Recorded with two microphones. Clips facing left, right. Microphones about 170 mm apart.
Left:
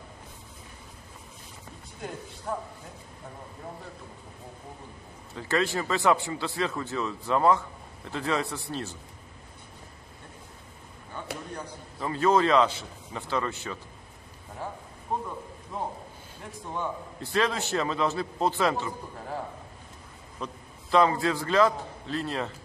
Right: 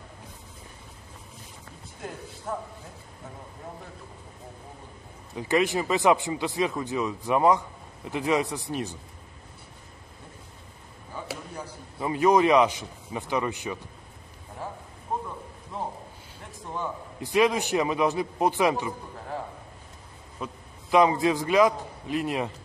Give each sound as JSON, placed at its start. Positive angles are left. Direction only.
{"t": 2.0, "sound": "speech", "side_deg": 0}
{"t": 5.3, "sound": "speech", "side_deg": -15}
{"t": 11.1, "sound": "a sound", "side_deg": -5}
{"t": 12.0, "sound": "speech", "side_deg": -15}
{"t": 14.6, "sound": "speech", "side_deg": 0}
{"t": 16.4, "sound": "speech", "side_deg": 0}
{"t": 17.2, "sound": "speech", "side_deg": -15}
{"t": 20.3, "sound": "a man's voice", "side_deg": -10}